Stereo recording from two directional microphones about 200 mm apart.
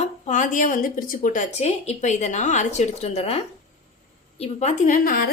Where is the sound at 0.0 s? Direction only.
40° left (ahead or behind).